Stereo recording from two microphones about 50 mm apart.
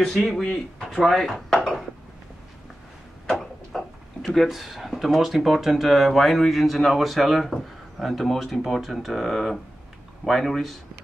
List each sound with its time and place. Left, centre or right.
0.0 s speech: centre
0.8 s speech: centre
1.5 s dishes: centre
3.3 s speech: centre